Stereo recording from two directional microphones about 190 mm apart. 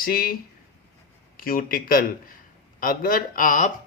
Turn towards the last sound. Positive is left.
turn(degrees=45)  # may be behind; listen again after turning